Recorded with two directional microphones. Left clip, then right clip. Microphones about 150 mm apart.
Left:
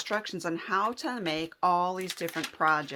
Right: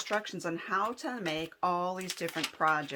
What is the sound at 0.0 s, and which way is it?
Speech, 30° left (ahead or behind).